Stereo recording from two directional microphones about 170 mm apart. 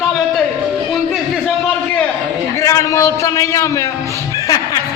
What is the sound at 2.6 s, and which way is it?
A man's voice, 15° left (ahead or behind).